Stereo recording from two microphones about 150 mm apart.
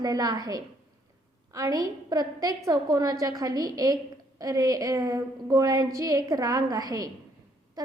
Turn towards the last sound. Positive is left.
turn(degrees=-25)  # may be behind; listen again after turning